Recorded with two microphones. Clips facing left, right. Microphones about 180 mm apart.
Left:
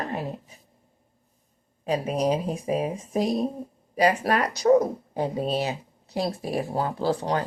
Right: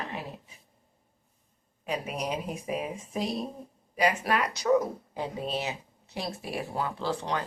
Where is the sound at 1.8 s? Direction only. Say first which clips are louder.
Left 8 dB; 35° left (ahead or behind).